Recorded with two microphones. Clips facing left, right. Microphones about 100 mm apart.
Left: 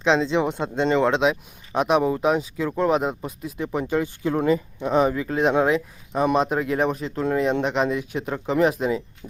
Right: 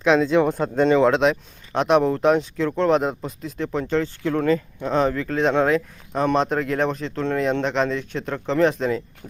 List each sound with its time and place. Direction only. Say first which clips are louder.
0.0 s speech: right 2 dB; 25° left (ahead or behind)
0.5 s speech: right 3 dB; centre (ahead or behind)